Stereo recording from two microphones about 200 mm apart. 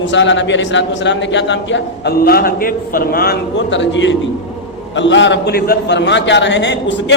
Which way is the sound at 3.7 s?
65° left (ahead or behind).